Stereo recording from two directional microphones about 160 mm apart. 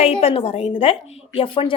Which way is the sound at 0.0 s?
35° left (ahead or behind).